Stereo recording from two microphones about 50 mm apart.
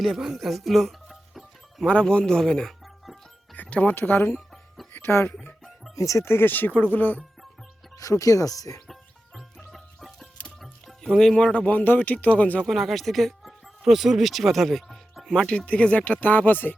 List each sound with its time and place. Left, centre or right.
0.0 s music: centre
1.9 s speech: left
3.5 s music: left
3.9 s speech: left
6.0 s speech: left
6.2 s speech: left
8.3 s speech: left
9.7 s music: centre
11.0 s speech: centre
11.3 s speech: left
11.6 s speech: left
12.6 s speech: centre
13.8 s speech: centre
15.4 s speech: left